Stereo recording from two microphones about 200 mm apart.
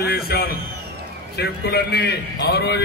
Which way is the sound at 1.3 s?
55° left (ahead or behind).